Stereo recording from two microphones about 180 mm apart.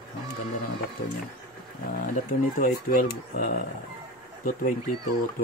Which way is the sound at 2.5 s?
50° left (ahead or behind).